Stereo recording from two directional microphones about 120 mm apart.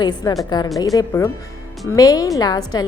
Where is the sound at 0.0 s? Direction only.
35° left (ahead or behind).